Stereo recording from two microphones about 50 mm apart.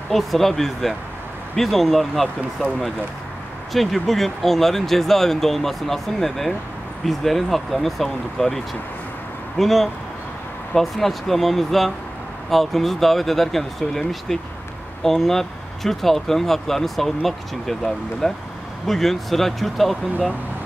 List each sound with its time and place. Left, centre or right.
0.1 s speech: centre
9.6 s speech: centre